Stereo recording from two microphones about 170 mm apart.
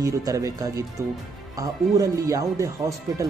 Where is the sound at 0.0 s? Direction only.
20° right (ahead or behind).